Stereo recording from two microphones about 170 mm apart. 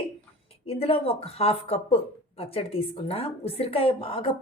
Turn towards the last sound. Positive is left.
turn(degrees=30)  # may be behind; listen again after turning